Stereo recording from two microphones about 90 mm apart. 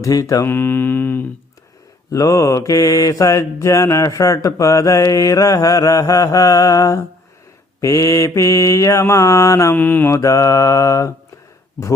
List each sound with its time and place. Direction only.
0.0 s mantra: 40° left (ahead or behind)
0.4 s mantra: 20° left (ahead or behind)
2.0 s mantra: 40° left (ahead or behind)
9.7 s mantra: 20° left (ahead or behind)
10.2 s mantra: 35° left (ahead or behind)